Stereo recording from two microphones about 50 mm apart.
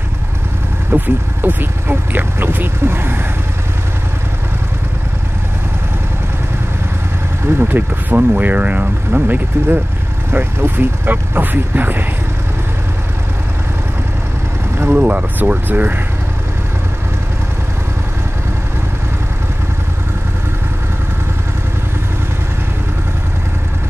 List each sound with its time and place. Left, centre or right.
0.9 s speech: right
7.4 s speech: right
14.9 s speech: right